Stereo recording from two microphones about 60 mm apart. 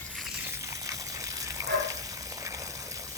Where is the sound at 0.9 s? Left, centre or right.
Right.